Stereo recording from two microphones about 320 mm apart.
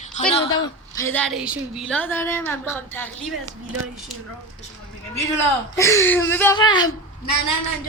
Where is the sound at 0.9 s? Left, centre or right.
Centre.